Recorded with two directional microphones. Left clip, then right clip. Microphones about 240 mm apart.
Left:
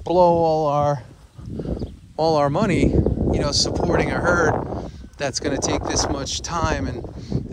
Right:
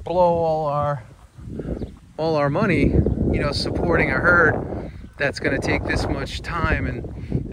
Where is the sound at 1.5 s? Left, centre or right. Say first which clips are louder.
Left 1 dB; right.